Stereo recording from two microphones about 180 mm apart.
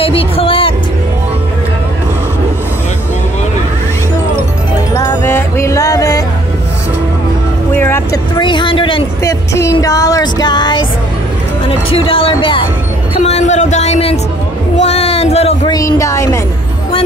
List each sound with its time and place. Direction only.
0.0 s music: 30° left (ahead or behind)
4.9 s music: 15° left (ahead or behind)
7.7 s vehicle: 15° left (ahead or behind)
8.4 s music: 25° left (ahead or behind)
9.2 s music: 15° left (ahead or behind)
13.1 s a sound: 35° left (ahead or behind)
15.7 s speech: 15° left (ahead or behind)